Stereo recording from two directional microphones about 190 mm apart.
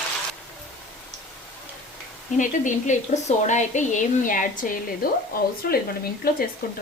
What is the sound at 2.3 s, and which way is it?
Speech, 40° left (ahead or behind).